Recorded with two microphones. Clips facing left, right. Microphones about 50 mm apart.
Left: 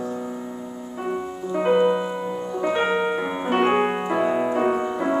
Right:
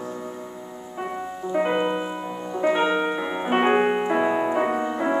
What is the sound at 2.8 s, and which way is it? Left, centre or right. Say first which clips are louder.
Piano: left 1 dB; centre.